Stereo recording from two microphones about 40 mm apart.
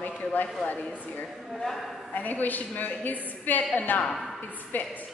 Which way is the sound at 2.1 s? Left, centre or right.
Left.